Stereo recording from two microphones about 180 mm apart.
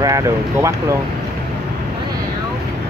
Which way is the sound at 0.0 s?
15° right (ahead or behind).